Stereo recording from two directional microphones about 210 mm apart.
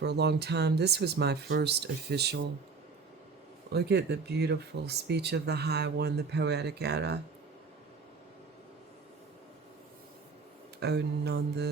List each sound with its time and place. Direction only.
0.0 s speech: 50° right (ahead or behind)
3.7 s speech: 50° right (ahead or behind)
10.8 s speech: 50° right (ahead or behind)